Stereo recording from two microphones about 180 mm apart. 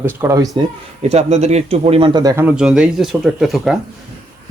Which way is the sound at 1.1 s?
40° right (ahead or behind).